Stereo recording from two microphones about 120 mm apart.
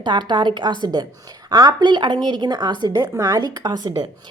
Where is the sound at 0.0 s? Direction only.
40° right (ahead or behind).